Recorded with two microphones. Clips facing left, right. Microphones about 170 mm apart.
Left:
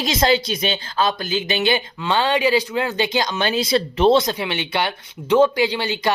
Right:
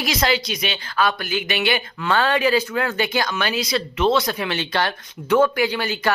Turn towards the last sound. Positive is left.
turn(degrees=15)  # may be behind; listen again after turning